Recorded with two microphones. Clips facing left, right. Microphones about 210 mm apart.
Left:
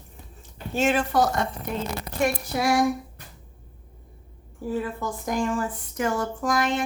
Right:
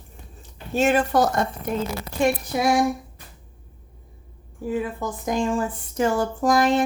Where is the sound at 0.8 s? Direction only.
40° right (ahead or behind).